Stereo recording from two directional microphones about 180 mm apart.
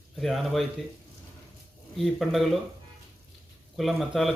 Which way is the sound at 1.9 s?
Centre (ahead or behind).